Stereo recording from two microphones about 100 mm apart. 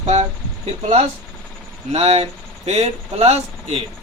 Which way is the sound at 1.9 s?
90° right.